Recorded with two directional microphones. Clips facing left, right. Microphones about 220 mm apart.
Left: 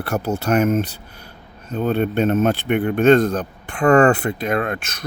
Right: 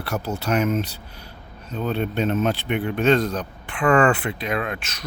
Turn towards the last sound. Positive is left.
turn(degrees=50)  # may be behind; listen again after turning